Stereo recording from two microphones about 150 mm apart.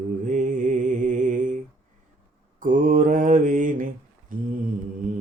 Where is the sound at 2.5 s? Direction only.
60° right (ahead or behind).